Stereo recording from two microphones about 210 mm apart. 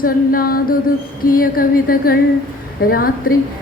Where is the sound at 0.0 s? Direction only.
45° left (ahead or behind).